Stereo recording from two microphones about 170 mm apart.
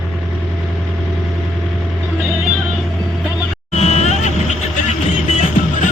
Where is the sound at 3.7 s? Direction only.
40° left (ahead or behind).